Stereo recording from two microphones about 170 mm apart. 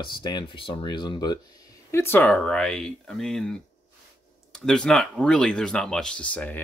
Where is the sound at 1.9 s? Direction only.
15° left (ahead or behind).